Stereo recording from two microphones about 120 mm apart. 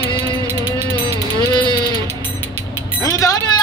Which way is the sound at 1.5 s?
40° left (ahead or behind).